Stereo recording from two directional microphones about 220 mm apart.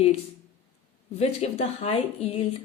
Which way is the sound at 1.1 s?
30° left (ahead or behind).